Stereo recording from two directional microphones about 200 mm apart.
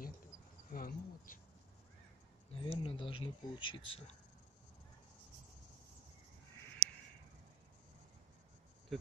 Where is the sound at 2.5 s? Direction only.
25° left (ahead or behind).